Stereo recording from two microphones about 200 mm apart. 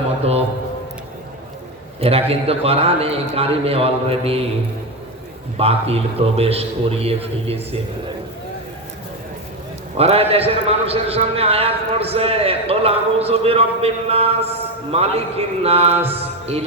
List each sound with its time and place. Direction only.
2.0 s a man's voice: 30° right (ahead or behind)
5.5 s a man's voice: 30° right (ahead or behind)
10.0 s a man's voice: 30° right (ahead or behind)
16.0 s mantra: 30° right (ahead or behind)